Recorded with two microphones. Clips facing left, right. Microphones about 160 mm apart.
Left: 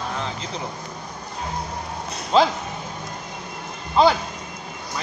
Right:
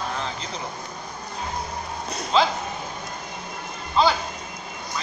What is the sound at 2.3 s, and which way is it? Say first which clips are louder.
Speech: left 3 dB; 45° left (ahead or behind).